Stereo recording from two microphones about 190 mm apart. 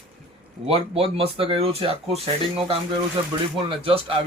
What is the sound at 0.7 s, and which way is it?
Speech, 30° right (ahead or behind).